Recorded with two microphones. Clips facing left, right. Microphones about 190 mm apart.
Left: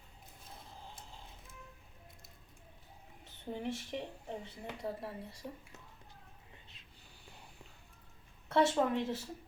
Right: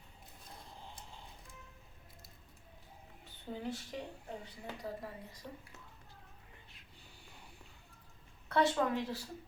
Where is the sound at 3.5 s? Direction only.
25° left (ahead or behind).